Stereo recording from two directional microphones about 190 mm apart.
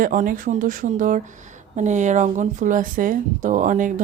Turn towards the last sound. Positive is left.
turn(degrees=-40)  # may be behind; listen again after turning